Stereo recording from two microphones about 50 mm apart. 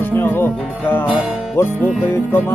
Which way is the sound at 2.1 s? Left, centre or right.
Left.